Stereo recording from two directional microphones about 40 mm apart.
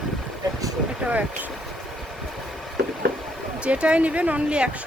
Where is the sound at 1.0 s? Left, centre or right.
Right.